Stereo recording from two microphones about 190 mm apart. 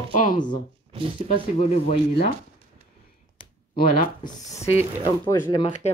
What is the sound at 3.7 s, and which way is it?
Speech, 50° left (ahead or behind).